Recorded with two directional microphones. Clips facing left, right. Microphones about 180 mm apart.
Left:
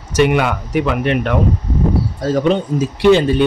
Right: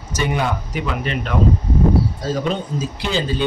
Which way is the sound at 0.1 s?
65° left (ahead or behind).